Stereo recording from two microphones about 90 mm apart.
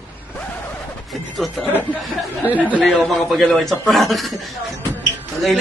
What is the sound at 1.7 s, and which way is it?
Speech, 20° left (ahead or behind).